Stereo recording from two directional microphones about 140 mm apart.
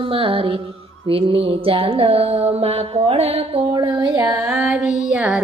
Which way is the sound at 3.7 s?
35° right (ahead or behind).